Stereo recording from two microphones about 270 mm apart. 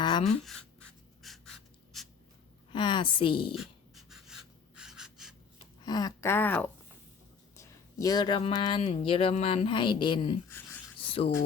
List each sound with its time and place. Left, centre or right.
0.0 s writing: centre
0.3 s writing: centre
2.7 s speech: centre
3.5 s pant: centre
5.8 s speech: centre
10.9 s a sound: centre